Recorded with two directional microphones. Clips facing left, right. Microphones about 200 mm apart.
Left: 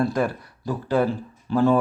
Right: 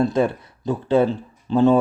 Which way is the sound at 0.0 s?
25° right (ahead or behind).